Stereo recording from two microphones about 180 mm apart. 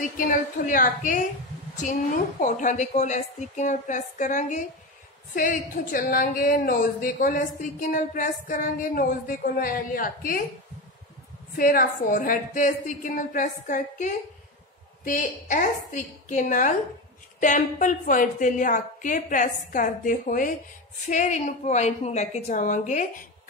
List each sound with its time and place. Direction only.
0.3 s a woman's voice: 50° left (ahead or behind)
2.4 s a woman's voice: 45° left (ahead or behind)
11.5 s a woman's voice: 50° left (ahead or behind)